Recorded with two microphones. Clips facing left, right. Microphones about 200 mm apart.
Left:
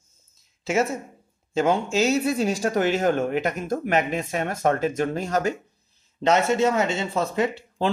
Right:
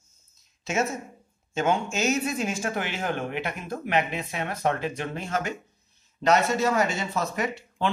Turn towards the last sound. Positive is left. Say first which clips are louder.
# left 5 dB
turn(degrees=30)  # may be behind; listen again after turning